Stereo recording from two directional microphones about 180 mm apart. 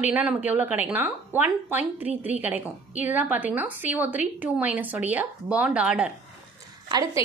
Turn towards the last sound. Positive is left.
turn(degrees=-20)  # may be behind; listen again after turning